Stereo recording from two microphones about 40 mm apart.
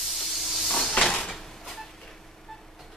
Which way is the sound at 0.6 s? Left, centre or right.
Left.